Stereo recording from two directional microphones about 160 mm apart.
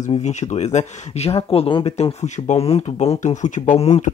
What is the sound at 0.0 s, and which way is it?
Speech, 45° left (ahead or behind).